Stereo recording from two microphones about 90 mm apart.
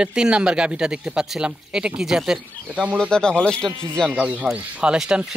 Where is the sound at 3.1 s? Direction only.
10° left (ahead or behind).